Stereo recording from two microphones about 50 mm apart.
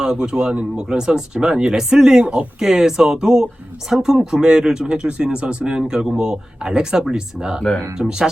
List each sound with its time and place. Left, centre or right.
0.0 s speech: centre